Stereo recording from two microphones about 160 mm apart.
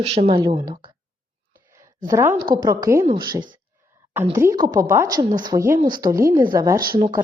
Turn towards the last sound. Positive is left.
turn(degrees=-30)  # may be behind; listen again after turning